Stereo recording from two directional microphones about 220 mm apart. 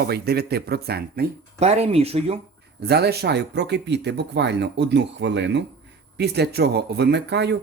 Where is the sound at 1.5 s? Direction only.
30° right (ahead or behind).